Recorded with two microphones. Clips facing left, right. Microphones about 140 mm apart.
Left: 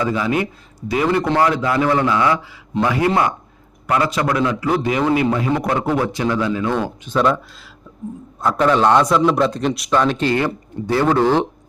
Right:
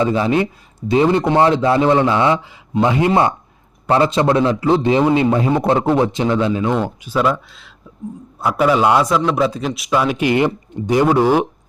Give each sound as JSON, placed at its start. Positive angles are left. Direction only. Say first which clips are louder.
{"t": 0.0, "sound": "a man's voice", "louder": "right 3 dB", "side_deg": -30}
{"t": 7.0, "sound": "a man's voice", "louder": "even", "side_deg": -5}